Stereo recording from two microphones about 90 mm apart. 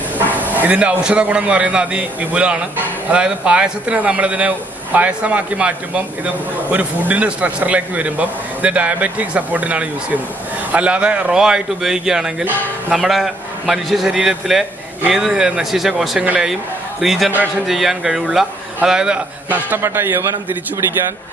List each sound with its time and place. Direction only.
0.2 s a man's voice: 20° right (ahead or behind)